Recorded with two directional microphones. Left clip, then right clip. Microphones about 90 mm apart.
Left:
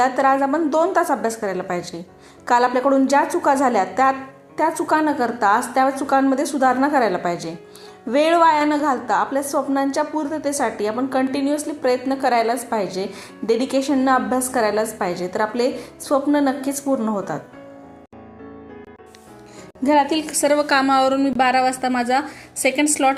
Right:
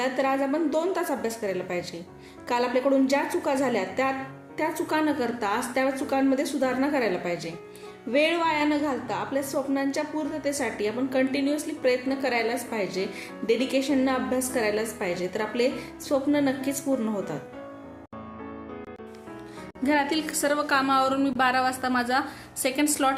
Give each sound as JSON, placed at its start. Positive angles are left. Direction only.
{"t": 0.0, "sound": "a woman's voice", "side_deg": 40}
{"t": 4.5, "sound": "a woman's voice", "side_deg": 35}
{"t": 19.8, "sound": "a woman's voice", "side_deg": 25}
{"t": 20.4, "sound": "a woman's voice", "side_deg": 55}
{"t": 21.1, "sound": "a woman's voice", "side_deg": 30}